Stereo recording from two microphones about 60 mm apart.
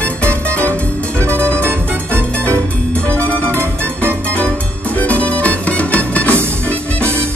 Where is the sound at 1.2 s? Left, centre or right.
Right.